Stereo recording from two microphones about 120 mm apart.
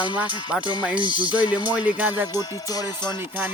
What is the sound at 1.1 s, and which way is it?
Speech, 40° left (ahead or behind).